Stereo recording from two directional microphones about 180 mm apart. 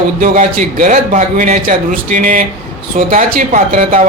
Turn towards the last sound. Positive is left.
turn(degrees=-50)  # may be behind; listen again after turning